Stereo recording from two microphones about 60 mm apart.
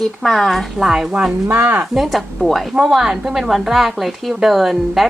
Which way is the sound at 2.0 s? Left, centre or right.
Centre.